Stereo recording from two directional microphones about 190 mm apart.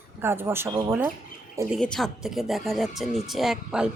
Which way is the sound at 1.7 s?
Centre (ahead or behind).